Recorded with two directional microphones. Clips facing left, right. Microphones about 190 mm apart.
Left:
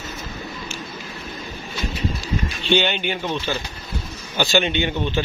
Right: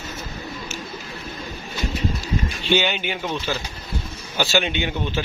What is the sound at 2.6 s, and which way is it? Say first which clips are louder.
Speech: left 2 dB; 5° right (ahead or behind).